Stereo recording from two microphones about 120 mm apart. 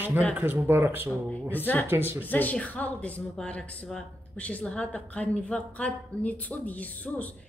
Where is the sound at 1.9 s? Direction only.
20° right (ahead or behind).